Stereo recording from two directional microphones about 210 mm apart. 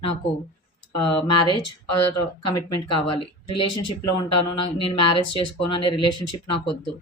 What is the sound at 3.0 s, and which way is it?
Speech, 25° left (ahead or behind).